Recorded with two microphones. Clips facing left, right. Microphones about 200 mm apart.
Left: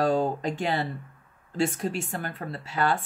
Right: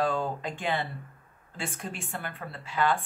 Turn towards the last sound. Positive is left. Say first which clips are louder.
# left 1 dB
turn(degrees=40)  # may be behind; listen again after turning